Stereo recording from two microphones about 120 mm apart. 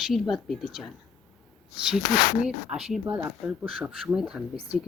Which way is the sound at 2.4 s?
5° right (ahead or behind).